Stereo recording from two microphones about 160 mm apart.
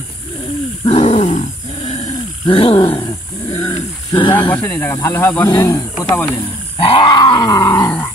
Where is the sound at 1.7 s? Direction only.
45° left (ahead or behind).